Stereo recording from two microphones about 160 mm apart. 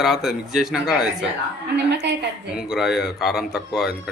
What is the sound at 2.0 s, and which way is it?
Speech, 90° right.